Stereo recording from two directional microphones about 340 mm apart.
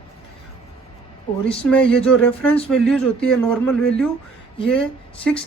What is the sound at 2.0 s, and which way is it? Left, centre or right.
Speech, centre.